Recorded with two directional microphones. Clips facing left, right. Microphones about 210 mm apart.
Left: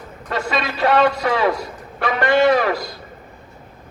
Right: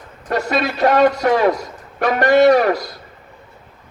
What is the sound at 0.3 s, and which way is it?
A man's voice, 40° right (ahead or behind).